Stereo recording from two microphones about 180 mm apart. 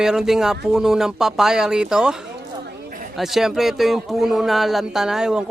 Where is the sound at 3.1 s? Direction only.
Centre (ahead or behind).